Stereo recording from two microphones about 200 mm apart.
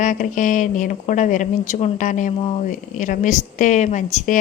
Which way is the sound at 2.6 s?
40° left (ahead or behind).